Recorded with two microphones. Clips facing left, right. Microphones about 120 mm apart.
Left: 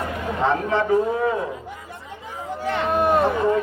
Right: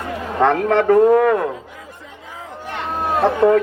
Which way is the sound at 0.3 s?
65° right (ahead or behind).